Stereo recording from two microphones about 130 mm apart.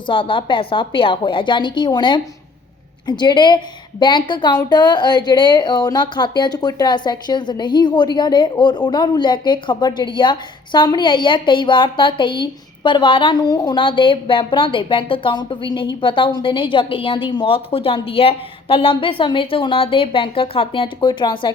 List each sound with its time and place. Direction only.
0.1 s a woman's voice: 40° left (ahead or behind)